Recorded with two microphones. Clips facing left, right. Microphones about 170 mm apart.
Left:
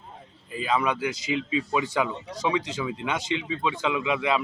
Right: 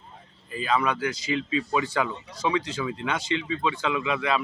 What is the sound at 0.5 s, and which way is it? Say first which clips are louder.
Speech: even; 15° left (ahead or behind).